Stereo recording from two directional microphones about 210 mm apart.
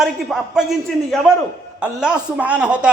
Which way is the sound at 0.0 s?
Centre (ahead or behind).